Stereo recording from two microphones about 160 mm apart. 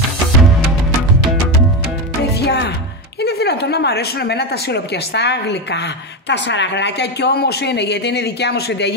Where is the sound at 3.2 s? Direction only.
90° left.